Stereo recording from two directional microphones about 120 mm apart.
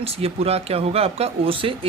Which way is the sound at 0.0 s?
55° right (ahead or behind).